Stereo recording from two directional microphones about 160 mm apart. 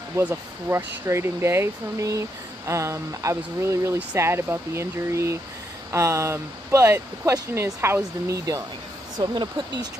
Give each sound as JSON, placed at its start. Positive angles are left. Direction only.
{"t": 0.1, "sound": "speech", "side_deg": -15}